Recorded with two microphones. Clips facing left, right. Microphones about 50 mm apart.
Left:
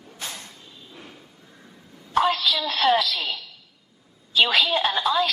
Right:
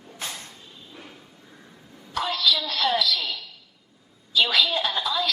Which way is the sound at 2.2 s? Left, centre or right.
Left.